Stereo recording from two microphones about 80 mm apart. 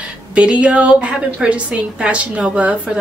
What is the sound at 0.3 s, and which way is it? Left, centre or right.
A woman's voice, centre.